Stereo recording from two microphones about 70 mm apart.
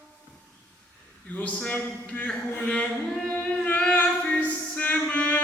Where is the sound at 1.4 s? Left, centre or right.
Left.